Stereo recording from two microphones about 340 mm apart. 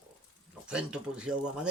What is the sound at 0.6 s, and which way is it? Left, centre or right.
Speech, centre.